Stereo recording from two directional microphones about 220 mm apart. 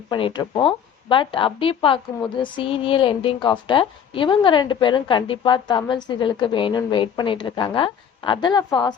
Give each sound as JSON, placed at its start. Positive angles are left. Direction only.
{"t": 0.1, "sound": "a woman's voice", "side_deg": 20}